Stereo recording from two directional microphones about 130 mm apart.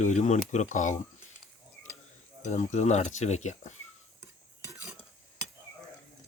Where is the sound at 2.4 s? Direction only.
65° left (ahead or behind).